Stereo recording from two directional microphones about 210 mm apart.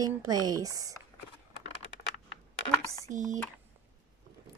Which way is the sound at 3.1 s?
35° right (ahead or behind).